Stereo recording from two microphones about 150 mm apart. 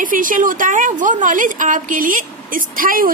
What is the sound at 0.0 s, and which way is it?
A woman's voice, 65° right (ahead or behind).